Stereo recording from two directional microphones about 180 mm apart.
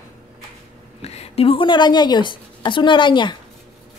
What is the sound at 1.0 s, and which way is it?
A woman's voice, 35° left (ahead or behind).